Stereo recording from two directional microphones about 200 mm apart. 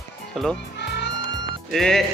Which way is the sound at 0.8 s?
55° left (ahead or behind).